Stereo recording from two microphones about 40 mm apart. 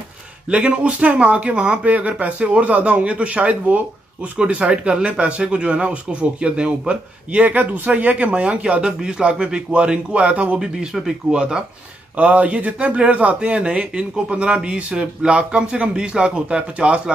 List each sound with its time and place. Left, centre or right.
0.5 s a man's voice: right
7.4 s speech: right
8.8 s a man's voice: right
10.6 s a man's voice: centre
12.2 s a man's voice: right